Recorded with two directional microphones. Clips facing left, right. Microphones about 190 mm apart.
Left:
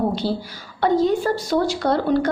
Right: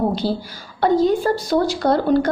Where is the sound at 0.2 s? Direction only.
40° right (ahead or behind).